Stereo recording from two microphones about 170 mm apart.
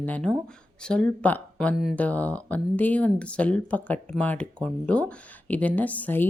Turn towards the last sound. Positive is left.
turn(degrees=10)  # may be behind; listen again after turning